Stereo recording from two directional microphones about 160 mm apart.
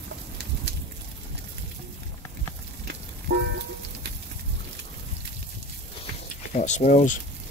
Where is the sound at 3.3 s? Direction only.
90° right.